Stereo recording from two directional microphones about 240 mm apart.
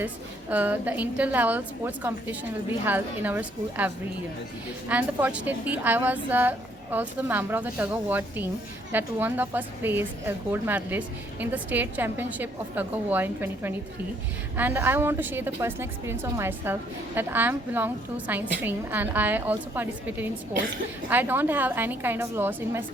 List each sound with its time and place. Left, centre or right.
0.5 s a woman's voice: centre